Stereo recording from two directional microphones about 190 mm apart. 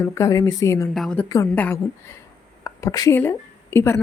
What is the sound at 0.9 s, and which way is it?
A woman's voice, 5° left (ahead or behind).